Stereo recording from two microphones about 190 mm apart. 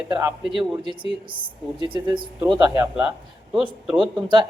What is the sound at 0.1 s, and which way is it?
Speech, 15° right (ahead or behind).